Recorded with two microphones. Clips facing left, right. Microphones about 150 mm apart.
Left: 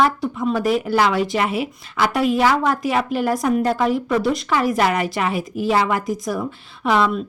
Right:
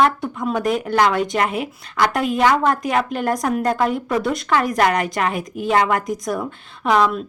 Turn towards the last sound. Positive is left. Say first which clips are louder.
# right 1 dB
turn(degrees=0)  # may be behind; listen again after turning